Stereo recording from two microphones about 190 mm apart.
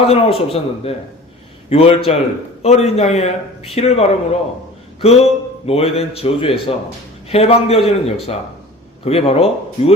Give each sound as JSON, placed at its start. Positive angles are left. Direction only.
{"t": 0.0, "sound": "a man's voice", "side_deg": 30}